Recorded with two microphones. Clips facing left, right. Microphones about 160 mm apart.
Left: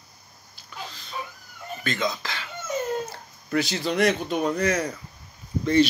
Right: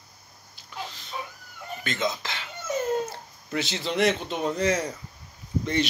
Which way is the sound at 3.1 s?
25° right (ahead or behind).